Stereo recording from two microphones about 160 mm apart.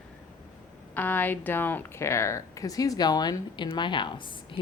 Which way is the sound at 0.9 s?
10° left (ahead or behind).